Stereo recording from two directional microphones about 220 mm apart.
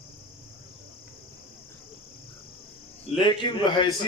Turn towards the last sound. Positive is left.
turn(degrees=20)  # may be behind; listen again after turning